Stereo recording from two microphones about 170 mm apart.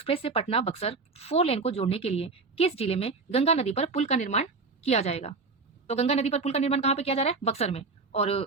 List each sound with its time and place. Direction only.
0.0 s speech: 35° left (ahead or behind)